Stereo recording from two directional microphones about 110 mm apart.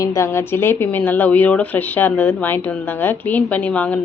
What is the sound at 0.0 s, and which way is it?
Speech, 25° left (ahead or behind).